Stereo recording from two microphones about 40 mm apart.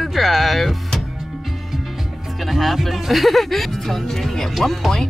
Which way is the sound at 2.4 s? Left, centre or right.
Centre.